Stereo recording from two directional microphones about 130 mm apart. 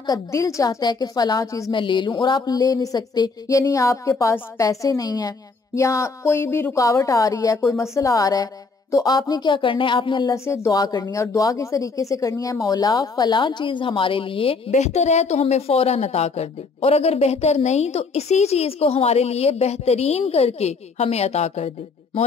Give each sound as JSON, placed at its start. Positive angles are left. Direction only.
{"t": 0.0, "sound": "speech", "side_deg": 25}
{"t": 1.7, "sound": "speech", "side_deg": 40}
{"t": 10.3, "sound": "speech", "side_deg": 20}
{"t": 14.8, "sound": "a woman's voice", "side_deg": 60}